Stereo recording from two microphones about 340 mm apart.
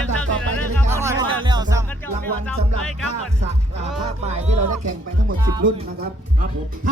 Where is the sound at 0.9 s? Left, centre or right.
Centre.